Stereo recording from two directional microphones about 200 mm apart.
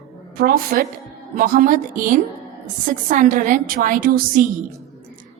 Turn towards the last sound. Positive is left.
turn(degrees=-45)  # may be behind; listen again after turning